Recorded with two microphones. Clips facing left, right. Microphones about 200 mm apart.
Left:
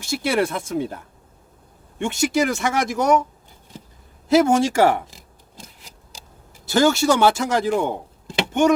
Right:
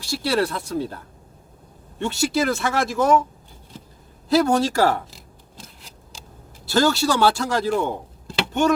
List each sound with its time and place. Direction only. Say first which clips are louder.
0.0 s speech: left 1 dB; 20° left (ahead or behind)
2.0 s speech: left 1 dB; 20° left (ahead or behind)
4.3 s scissors: left 2 dB; 20° left (ahead or behind)
6.7 s speech: left 2 dB; 20° left (ahead or behind)
8.4 s a sound: left 2 dB; 20° left (ahead or behind)